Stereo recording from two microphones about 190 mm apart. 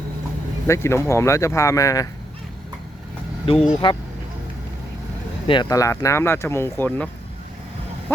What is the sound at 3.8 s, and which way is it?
Speech, 25° left (ahead or behind).